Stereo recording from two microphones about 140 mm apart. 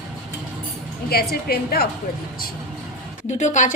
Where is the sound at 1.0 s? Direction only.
90° left.